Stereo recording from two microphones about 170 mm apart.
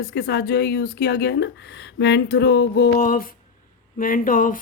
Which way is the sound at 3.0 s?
55° left (ahead or behind).